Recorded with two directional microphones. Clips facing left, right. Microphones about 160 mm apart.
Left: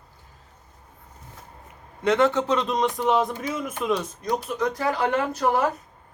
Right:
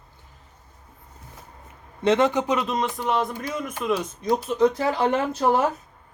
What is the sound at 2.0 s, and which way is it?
Speech, 20° right (ahead or behind).